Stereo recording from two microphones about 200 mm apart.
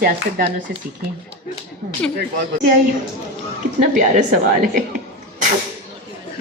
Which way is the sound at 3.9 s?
40° right (ahead or behind).